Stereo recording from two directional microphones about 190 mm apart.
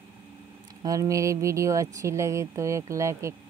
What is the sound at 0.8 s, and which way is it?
Speech, 20° right (ahead or behind).